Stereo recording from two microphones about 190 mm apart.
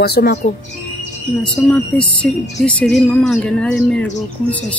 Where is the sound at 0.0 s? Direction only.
60° left (ahead or behind).